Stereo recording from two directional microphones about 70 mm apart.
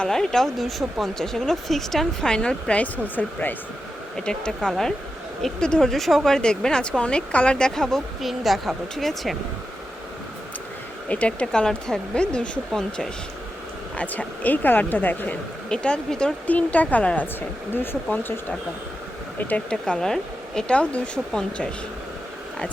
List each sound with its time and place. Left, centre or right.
0.0 s speech: centre; by 3.5 s left
4.3 s speech: centre
11.1 s speech: centre
15.7 s speech: centre
17.7 s speech: left
19.4 s speech: left
19.7 s speech: centre